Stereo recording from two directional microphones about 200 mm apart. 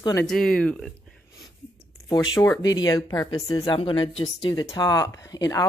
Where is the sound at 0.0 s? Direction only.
15° left (ahead or behind).